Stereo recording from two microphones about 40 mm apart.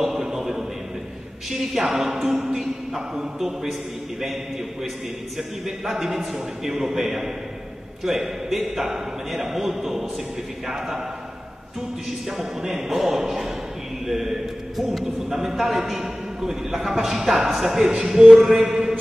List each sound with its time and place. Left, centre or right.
0.0 s music: centre
1.5 s a man's voice: centre
5.9 s a man's voice: centre
12.3 s a man's voice: centre
18.7 s a man's voice: centre